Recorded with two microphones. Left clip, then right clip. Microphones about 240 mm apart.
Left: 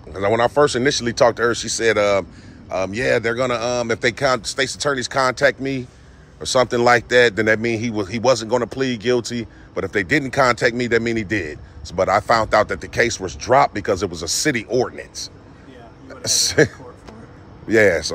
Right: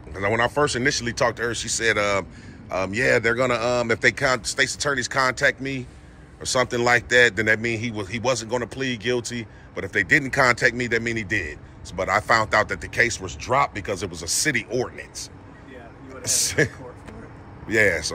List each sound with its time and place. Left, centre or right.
0.1 s a man's voice: centre